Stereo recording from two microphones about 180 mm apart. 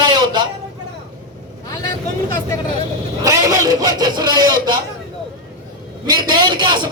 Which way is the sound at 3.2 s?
15° right (ahead or behind).